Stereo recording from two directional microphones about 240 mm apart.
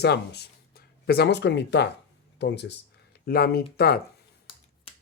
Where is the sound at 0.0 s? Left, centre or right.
Left.